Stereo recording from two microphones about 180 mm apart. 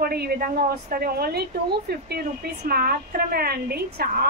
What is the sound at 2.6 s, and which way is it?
A woman's voice, 55° right (ahead or behind).